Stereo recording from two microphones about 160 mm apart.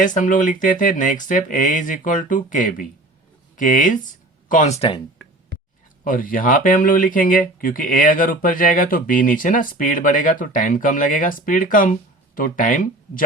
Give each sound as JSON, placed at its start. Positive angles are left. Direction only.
{"t": 0.0, "sound": "speech", "side_deg": 55}
{"t": 6.1, "sound": "speech", "side_deg": 60}